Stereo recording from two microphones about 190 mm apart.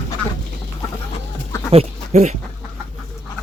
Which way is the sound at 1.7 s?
35° right (ahead or behind).